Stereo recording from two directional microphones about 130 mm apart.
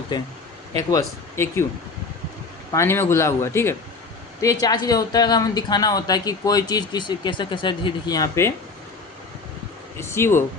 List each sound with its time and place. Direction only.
0.1 s speech: 35° left (ahead or behind)
0.9 s speech: 25° left (ahead or behind)
2.7 s speech: 20° left (ahead or behind)
10.0 s speech: 20° left (ahead or behind)